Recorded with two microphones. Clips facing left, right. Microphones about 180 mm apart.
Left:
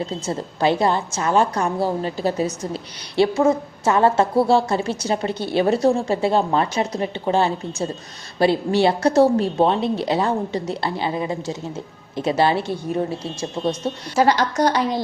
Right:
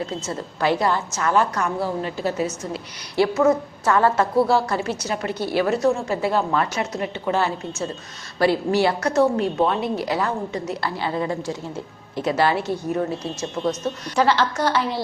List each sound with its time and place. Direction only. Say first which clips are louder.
0.0 s a woman's voice: left 2 dB; 25° left (ahead or behind)
14.5 s speech: left 3 dB; 15° left (ahead or behind)